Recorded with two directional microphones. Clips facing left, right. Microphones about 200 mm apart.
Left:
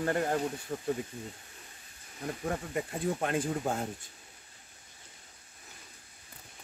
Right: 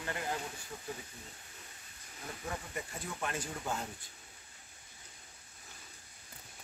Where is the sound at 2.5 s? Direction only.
55° left (ahead or behind).